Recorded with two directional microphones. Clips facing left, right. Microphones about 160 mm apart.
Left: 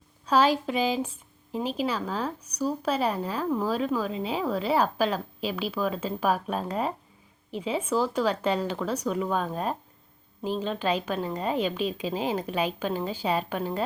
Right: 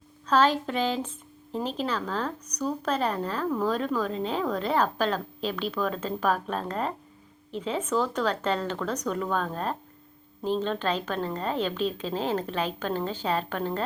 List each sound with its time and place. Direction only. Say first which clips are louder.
0.3 s speech: even; 10° left (ahead or behind)